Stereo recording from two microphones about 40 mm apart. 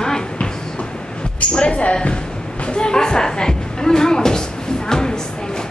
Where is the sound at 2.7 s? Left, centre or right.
Left.